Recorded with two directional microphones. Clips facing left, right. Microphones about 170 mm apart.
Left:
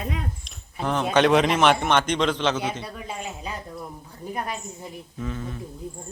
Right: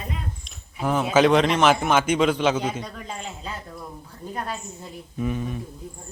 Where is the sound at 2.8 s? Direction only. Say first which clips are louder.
Left 1 dB; 5° left (ahead or behind).